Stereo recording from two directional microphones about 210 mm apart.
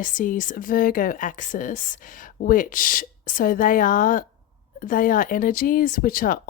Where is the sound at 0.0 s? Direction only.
40° left (ahead or behind).